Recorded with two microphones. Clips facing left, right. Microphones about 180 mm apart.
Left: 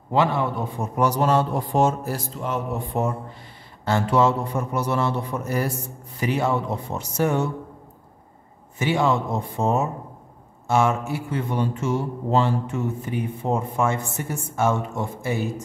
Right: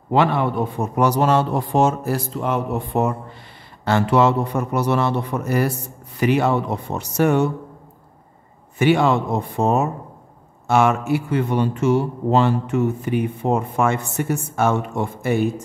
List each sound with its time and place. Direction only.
0.1 s speech: 65° right (ahead or behind)
8.7 s speech: 65° right (ahead or behind)